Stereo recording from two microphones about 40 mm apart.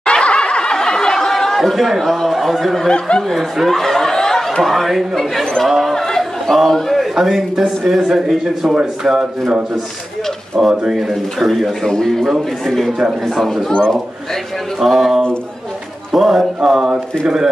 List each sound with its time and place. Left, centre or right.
0.0 s snicker: left; by 2.9 s centre
3.3 s a sound: centre
4.6 s speech: centre
5.9 s chatter: centre
7.2 s speech: centre
10.6 s speech: centre
11.8 s a man's voice: centre
13.7 s speech: left
14.8 s speech: centre